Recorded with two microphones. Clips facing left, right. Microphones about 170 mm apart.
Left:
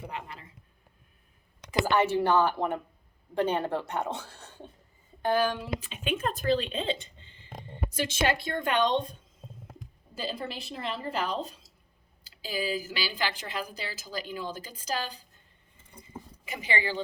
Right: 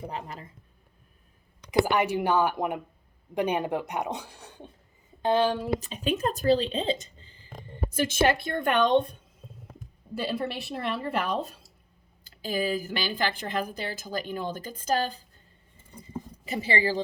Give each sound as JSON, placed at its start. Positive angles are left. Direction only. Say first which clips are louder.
{"t": 0.0, "sound": "speech", "louder": "right 3 dB", "side_deg": -35}
{"t": 1.8, "sound": "speech", "louder": "even", "side_deg": -15}
{"t": 5.2, "sound": "speech", "louder": "right 3 dB", "side_deg": -25}
{"t": 5.5, "sound": "speech", "louder": "right 6 dB", "side_deg": -40}
{"t": 10.2, "sound": "a woman's voice", "louder": "right 5 dB", "side_deg": -65}
{"t": 16.5, "sound": "speech", "louder": "right 5 dB", "side_deg": -35}